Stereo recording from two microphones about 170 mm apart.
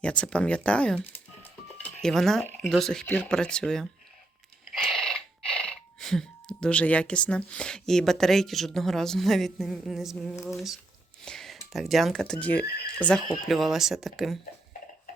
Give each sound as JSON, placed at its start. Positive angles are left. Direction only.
{"t": 0.0, "sound": "speech", "side_deg": 5}
{"t": 4.7, "sound": "a sound", "side_deg": 0}
{"t": 10.3, "sound": "speech", "side_deg": 20}
{"t": 11.3, "sound": "speech", "side_deg": 0}